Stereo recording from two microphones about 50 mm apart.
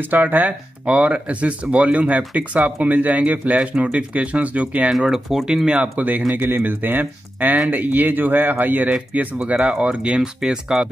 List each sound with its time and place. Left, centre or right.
0.0 s speech: right
5.0 s speech: centre
5.8 s speech: right; by 10.9 s centre